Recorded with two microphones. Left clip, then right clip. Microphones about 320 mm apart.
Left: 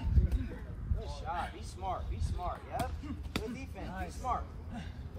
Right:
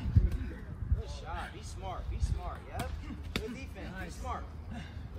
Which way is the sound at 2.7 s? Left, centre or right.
Centre.